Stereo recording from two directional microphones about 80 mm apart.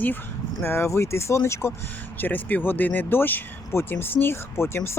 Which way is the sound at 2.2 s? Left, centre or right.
Left.